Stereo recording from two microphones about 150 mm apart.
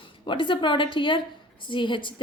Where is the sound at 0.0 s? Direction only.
35° left (ahead or behind).